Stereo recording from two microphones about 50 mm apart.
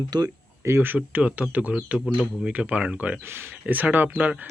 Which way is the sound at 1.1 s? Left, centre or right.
Right.